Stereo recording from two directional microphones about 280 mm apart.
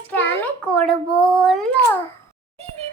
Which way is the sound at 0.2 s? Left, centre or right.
Centre.